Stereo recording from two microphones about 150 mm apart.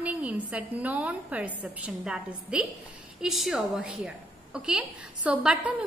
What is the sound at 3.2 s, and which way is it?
Speech, centre (ahead or behind).